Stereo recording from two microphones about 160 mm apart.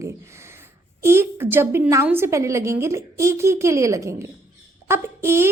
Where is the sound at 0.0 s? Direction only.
15° right (ahead or behind).